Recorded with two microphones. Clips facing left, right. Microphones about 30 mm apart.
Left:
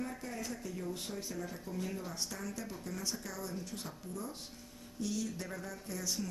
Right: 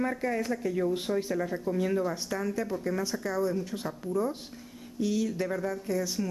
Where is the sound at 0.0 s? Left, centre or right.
Right.